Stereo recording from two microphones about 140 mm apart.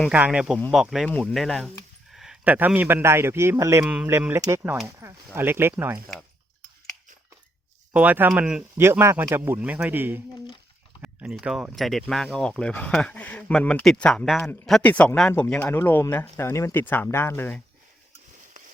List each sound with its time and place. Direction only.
0.1 s a man's voice: 10° right (ahead or behind)
7.9 s a man's voice: 10° right (ahead or behind)
8.8 s a man's voice: 20° right (ahead or behind); by 17.6 s 15° left (ahead or behind)